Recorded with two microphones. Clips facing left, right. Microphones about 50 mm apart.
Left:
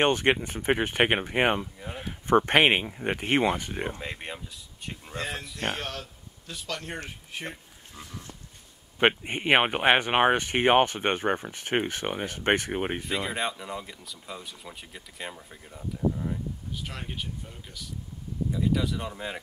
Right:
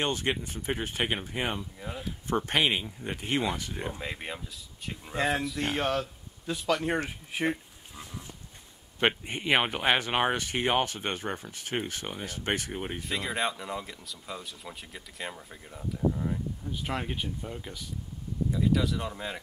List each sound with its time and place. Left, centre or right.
0.0 s speech: left
3.9 s speech: centre
5.8 s speech: centre
9.0 s speech: left
13.0 s speech: centre
18.5 s speech: centre